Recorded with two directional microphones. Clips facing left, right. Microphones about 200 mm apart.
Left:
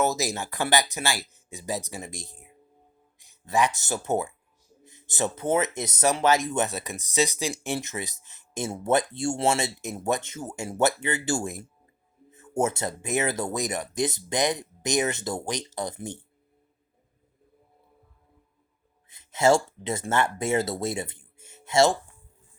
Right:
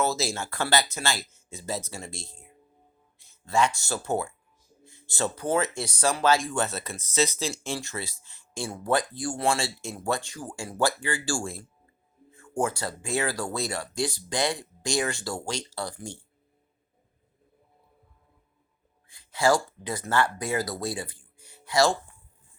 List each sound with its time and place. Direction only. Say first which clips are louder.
0.0 s speech: left 2 dB; 20° left (ahead or behind)
19.0 s speech: left 3 dB; 20° left (ahead or behind)